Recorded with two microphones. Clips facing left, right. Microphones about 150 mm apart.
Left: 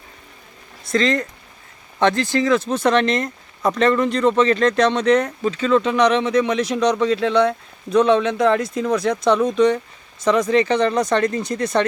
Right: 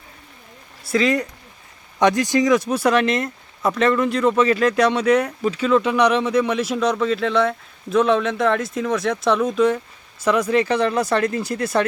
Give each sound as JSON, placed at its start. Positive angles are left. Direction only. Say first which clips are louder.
{"t": 0.9, "sound": "speech", "louder": "even", "side_deg": -10}